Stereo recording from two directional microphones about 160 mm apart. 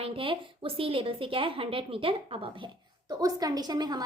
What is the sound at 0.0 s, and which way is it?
A woman's voice, 35° right (ahead or behind).